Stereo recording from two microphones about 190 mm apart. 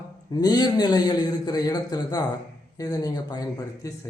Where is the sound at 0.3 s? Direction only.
20° left (ahead or behind).